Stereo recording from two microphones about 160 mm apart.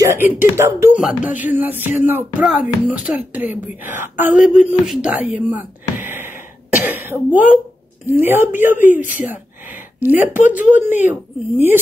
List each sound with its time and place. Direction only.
0.0 s speech: 15° right (ahead or behind)
4.6 s a sound: 5° right (ahead or behind)
8.1 s speech: 15° right (ahead or behind)